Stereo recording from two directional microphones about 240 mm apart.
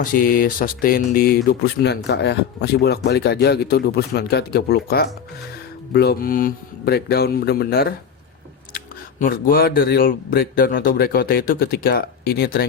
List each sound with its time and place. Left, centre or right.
0.0 s speech: left